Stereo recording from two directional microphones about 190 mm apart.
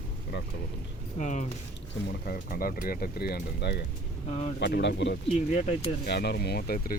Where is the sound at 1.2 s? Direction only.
40° left (ahead or behind).